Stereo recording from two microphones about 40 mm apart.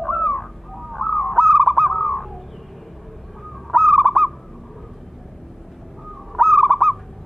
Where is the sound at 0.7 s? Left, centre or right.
Centre.